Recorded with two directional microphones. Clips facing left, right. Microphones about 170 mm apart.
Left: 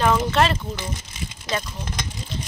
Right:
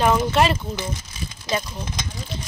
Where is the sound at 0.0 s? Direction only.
15° right (ahead or behind).